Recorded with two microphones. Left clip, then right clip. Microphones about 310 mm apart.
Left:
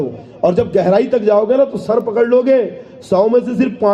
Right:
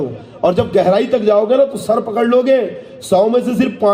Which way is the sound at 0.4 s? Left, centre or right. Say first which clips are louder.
Right 1 dB; left.